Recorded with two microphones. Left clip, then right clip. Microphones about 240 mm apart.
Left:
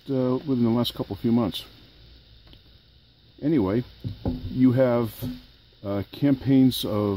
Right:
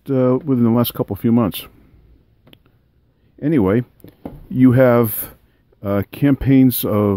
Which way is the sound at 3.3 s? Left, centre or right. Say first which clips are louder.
Right 7 dB; right.